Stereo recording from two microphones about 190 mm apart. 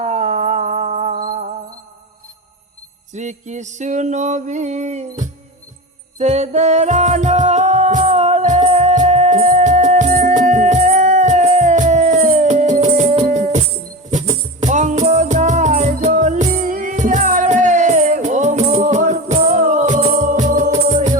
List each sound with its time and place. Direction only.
0.0 s music: 35° right (ahead or behind)
3.1 s music: 40° right (ahead or behind)